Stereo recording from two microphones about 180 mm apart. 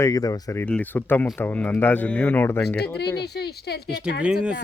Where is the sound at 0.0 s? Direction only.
20° left (ahead or behind).